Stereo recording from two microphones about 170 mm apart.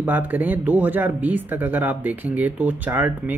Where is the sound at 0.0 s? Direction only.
10° right (ahead or behind).